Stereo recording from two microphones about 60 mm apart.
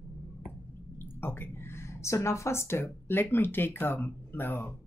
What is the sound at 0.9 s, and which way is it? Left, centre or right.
Speech, left.